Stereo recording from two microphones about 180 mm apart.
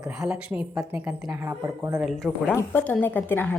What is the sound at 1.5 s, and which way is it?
Speech, 15° right (ahead or behind).